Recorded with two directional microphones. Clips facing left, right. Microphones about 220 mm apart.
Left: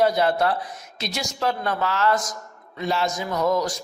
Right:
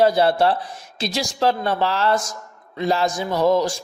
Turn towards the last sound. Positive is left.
turn(degrees=-30)  # may be behind; listen again after turning